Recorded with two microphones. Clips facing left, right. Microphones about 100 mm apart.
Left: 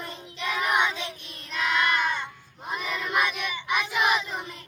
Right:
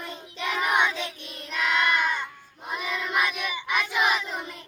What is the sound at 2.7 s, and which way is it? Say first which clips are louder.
Battle cry: right 1 dB; 10° right (ahead or behind).